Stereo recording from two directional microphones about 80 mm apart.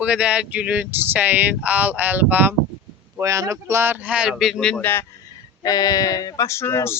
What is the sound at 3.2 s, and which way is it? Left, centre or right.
Speech, right.